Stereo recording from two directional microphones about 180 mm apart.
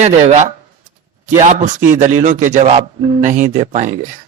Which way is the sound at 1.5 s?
45° right (ahead or behind).